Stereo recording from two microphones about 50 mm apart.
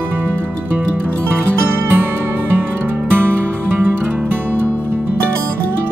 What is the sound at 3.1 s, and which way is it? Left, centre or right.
Music, right.